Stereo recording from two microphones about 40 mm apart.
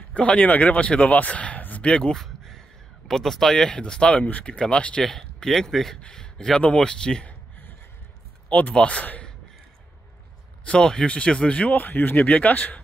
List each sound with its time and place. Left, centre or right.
0.1 s speech: left
1.8 s speech: left
2.1 s a sound: centre
3.1 s speech: centre
3.7 s speech: left
4.2 s speech: left
4.6 s speech: left
5.0 s speech: centre
6.0 s speech: centre
8.5 s speech: left
10.8 s speech: centre
11.7 s speech: left
12.3 s speech: left